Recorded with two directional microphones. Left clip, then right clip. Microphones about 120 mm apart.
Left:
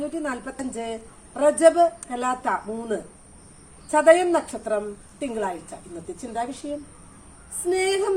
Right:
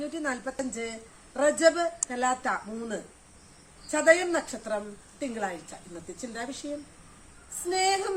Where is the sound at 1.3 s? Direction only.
20° right (ahead or behind).